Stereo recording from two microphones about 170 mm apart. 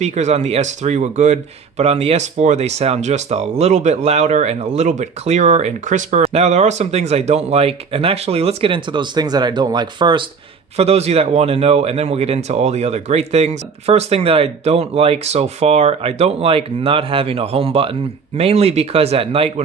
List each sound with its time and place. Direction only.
0.0 s speech: 40° right (ahead or behind); by 10.2 s 25° right (ahead or behind)
10.8 s speech: 40° right (ahead or behind)